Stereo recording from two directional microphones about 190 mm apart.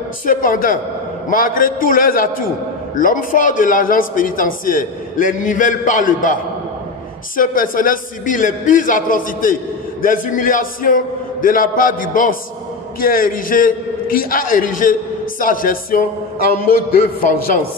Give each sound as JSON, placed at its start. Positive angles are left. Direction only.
{"t": 0.2, "sound": "a man's voice", "side_deg": 45}
{"t": 7.3, "sound": "a man's voice", "side_deg": 45}